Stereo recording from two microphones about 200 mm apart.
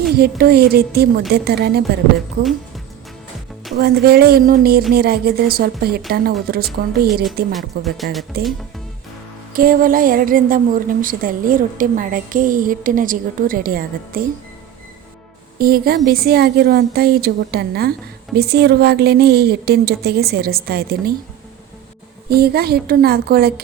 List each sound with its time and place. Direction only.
0.1 s a woman's voice: 50° right (ahead or behind)
2.4 s music: centre (ahead or behind)
3.8 s a woman's voice: 50° right (ahead or behind)
7.5 s speech: centre (ahead or behind)
8.4 s a woman's voice: 50° right (ahead or behind)
15.5 s a woman's voice: 50° right (ahead or behind)
22.3 s a woman's voice: 50° right (ahead or behind)